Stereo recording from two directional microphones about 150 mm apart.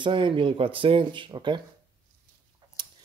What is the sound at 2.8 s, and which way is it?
Tick-tock, 30° right (ahead or behind).